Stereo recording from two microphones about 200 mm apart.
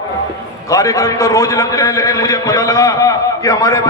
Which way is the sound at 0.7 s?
15° left (ahead or behind).